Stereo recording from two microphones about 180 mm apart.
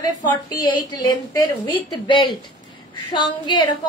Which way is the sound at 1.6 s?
25° left (ahead or behind).